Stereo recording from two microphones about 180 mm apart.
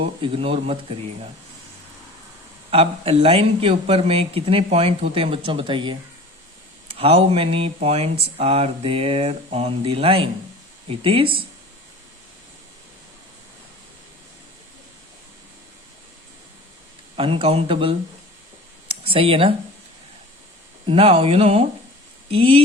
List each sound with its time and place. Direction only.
0.0 s speech: 30° right (ahead or behind)
2.6 s speech: 35° right (ahead or behind)
17.2 s speech: 30° right (ahead or behind)
20.8 s speech: 30° right (ahead or behind)